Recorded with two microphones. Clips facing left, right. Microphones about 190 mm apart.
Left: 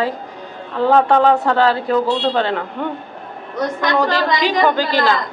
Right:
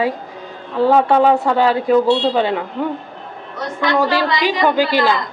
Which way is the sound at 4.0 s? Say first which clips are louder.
Even; 10° right (ahead or behind).